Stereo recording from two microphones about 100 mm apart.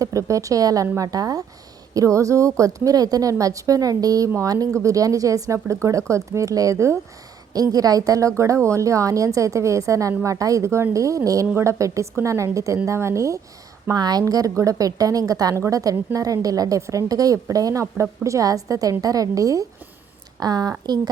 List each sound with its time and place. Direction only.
0.0 s a woman's voice: 35° right (ahead or behind)